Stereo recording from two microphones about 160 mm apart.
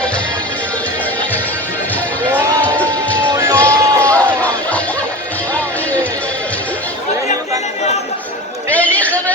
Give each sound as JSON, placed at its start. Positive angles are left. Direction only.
{"t": 2.6, "sound": "music", "side_deg": 10}
{"t": 3.3, "sound": "music", "side_deg": -20}
{"t": 4.0, "sound": "crowd", "side_deg": 10}
{"t": 8.7, "sound": "a sound", "side_deg": 10}